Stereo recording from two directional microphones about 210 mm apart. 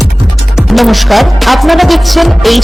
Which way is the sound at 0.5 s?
Centre (ahead or behind).